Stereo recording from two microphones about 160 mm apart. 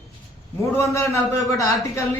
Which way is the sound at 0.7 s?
20° left (ahead or behind).